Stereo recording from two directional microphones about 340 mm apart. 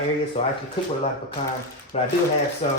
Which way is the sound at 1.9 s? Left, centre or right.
Centre.